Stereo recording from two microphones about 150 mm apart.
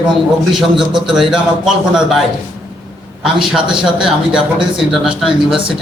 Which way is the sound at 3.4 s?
5° right (ahead or behind).